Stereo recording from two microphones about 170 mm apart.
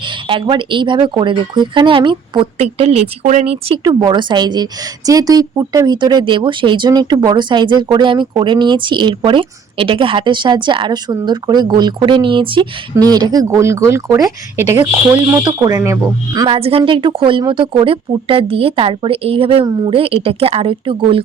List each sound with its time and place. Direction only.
0.0 s speech: 30° right (ahead or behind)
16.6 s speech: 35° right (ahead or behind)